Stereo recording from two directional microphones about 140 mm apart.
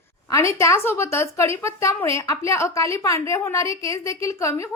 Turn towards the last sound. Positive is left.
turn(degrees=20)  # may be behind; listen again after turning